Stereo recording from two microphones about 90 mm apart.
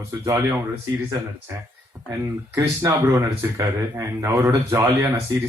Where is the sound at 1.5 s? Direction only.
25° right (ahead or behind).